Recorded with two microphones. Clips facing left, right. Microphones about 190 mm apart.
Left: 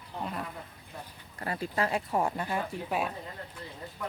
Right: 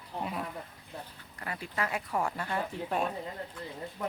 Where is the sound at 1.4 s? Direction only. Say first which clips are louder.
Left 4 dB; 35° left (ahead or behind).